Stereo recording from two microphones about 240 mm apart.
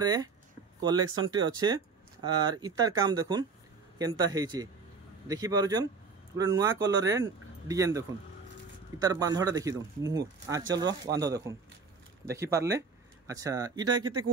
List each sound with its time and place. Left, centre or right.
0.0 s speech: centre
9.0 s speech: centre